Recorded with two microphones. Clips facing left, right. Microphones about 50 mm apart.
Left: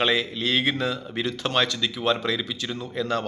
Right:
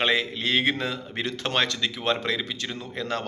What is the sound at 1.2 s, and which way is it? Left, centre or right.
A man's voice, right.